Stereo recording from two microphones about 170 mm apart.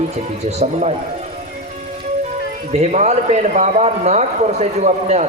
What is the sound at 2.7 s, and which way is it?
A man's voice, 40° right (ahead or behind).